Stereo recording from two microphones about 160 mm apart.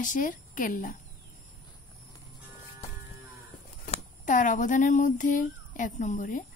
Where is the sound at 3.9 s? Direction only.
50° left (ahead or behind).